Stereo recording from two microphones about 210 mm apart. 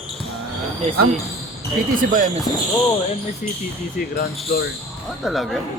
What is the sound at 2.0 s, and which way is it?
Speech, 40° right (ahead or behind).